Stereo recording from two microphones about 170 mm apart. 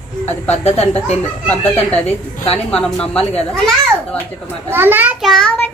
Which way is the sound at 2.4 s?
35° left (ahead or behind).